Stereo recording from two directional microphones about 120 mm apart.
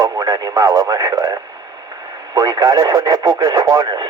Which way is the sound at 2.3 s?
30° right (ahead or behind).